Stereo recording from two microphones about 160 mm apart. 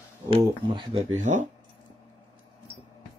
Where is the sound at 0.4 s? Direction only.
30° right (ahead or behind).